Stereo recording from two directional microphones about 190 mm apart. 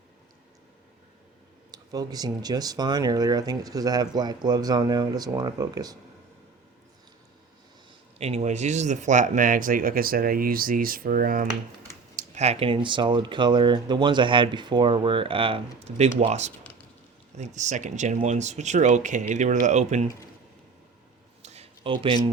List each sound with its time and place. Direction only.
1.7 s speech: 20° right (ahead or behind)
8.2 s speech: 35° right (ahead or behind)
12.1 s speech: 35° right (ahead or behind)
21.4 s a sound: 35° right (ahead or behind)